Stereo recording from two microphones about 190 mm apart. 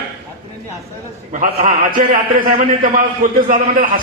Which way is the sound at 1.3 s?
40° right (ahead or behind).